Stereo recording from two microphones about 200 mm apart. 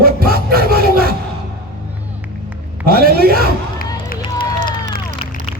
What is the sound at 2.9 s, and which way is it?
Speech, 50° right (ahead or behind).